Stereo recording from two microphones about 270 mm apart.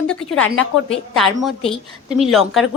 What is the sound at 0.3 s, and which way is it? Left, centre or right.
Speech, left.